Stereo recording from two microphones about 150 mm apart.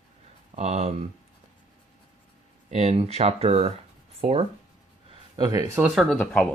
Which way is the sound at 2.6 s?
45° right (ahead or behind).